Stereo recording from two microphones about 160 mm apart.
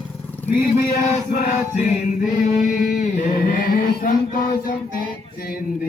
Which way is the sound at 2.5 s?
60° left (ahead or behind).